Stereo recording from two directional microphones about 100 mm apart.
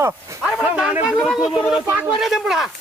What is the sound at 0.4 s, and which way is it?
A man's voice, 10° right (ahead or behind).